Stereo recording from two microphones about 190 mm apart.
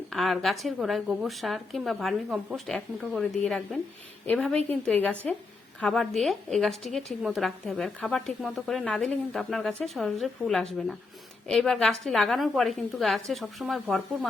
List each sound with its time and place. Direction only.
0.1 s a woman's voice: centre (ahead or behind)